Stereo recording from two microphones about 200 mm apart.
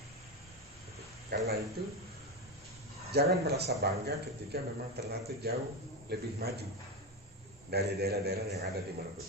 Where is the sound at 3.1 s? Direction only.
55° right (ahead or behind).